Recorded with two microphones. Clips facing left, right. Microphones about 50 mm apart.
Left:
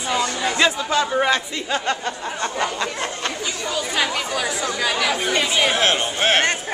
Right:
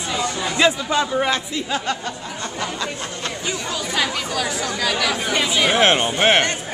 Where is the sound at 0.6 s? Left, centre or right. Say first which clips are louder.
Right 2 dB; centre.